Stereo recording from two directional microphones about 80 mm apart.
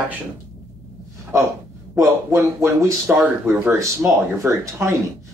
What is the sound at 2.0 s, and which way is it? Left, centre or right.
Speech, right.